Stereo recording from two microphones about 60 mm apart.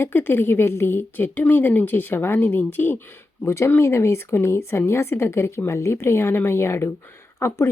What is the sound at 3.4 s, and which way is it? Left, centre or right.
Speech, left.